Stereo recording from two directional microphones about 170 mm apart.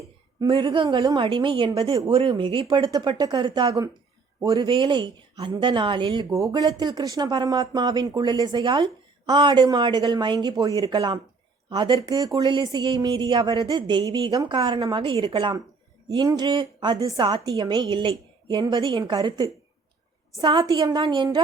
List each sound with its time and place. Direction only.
0.3 s speech: 25° right (ahead or behind)